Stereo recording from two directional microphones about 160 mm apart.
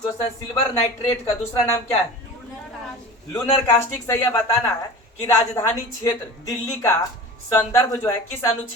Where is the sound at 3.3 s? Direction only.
15° left (ahead or behind).